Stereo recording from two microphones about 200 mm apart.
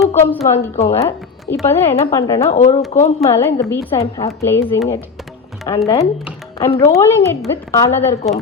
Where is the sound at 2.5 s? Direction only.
35° left (ahead or behind).